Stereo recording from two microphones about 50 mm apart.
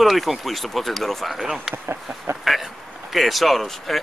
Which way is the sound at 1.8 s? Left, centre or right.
Right.